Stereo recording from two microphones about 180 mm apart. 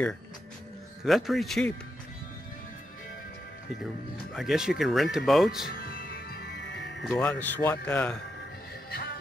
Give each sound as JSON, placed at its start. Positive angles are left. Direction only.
{"t": 1.0, "sound": "speech", "side_deg": 0}
{"t": 3.8, "sound": "speech", "side_deg": 0}
{"t": 5.7, "sound": "music", "side_deg": 55}
{"t": 7.0, "sound": "speech", "side_deg": 5}